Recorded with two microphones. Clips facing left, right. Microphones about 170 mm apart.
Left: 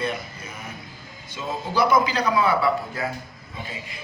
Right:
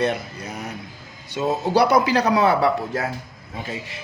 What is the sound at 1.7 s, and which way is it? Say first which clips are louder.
A man's voice: right 3 dB; 65° right (ahead or behind).